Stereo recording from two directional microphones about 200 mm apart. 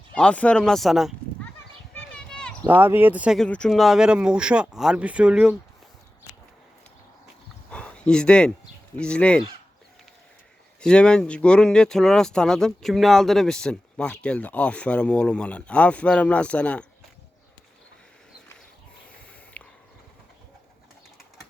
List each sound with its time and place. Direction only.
0.1 s speech: 5° left (ahead or behind)
2.1 s a sound: 5° left (ahead or behind)
2.6 s speech: 10° right (ahead or behind)
7.7 s a sound: 5° left (ahead or behind)
9.0 s speech: 5° left (ahead or behind)
10.8 s speech: 5° left (ahead or behind)
19.6 s horse: 5° left (ahead or behind)